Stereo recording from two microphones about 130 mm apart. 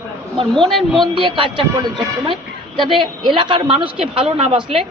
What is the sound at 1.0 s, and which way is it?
A man's voice, 40° right (ahead or behind).